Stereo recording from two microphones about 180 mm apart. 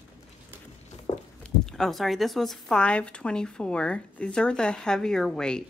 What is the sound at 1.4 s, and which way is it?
Speech, 5° left (ahead or behind).